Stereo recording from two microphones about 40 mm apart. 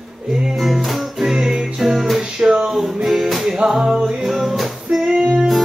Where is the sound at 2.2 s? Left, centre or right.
Centre.